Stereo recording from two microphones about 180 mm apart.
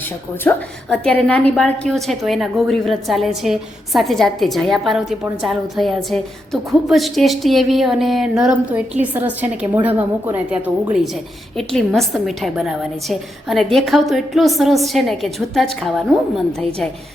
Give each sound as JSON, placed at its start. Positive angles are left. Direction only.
{"t": 0.4, "sound": "a woman's voice", "side_deg": 5}